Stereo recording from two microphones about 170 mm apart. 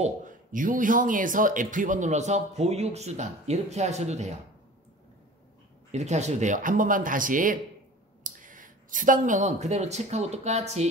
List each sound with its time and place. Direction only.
0.0 s speech: 50° right (ahead or behind)
5.9 s speech: 40° right (ahead or behind)